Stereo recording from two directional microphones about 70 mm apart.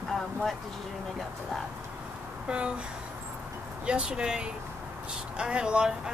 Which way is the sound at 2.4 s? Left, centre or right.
Centre.